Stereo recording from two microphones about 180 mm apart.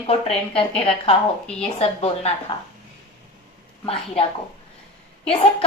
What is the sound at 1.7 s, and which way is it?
Speech, 35° left (ahead or behind).